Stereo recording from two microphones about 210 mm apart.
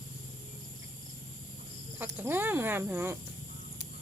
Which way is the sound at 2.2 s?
10° right (ahead or behind).